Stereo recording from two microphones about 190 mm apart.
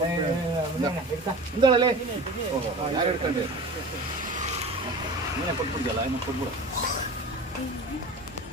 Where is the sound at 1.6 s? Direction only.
25° right (ahead or behind).